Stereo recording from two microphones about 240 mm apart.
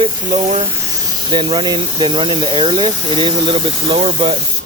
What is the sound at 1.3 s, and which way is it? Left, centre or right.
Speech, right.